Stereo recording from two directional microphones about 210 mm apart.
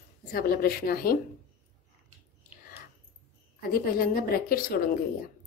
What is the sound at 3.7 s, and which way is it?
A woman's voice, 45° left (ahead or behind).